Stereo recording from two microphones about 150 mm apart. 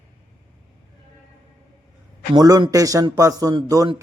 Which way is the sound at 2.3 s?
25° right (ahead or behind).